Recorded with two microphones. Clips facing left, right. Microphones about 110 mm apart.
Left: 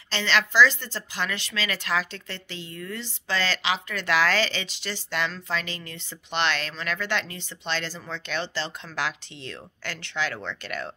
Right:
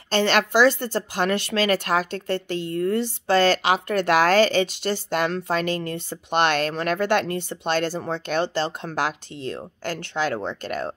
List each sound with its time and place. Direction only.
0.1 s speech: 50° right (ahead or behind)